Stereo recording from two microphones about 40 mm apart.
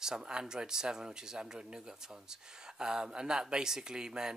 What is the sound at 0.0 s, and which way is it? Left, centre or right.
Speech, centre.